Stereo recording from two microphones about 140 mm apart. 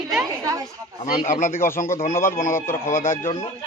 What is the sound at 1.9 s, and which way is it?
Speech, 75° left (ahead or behind).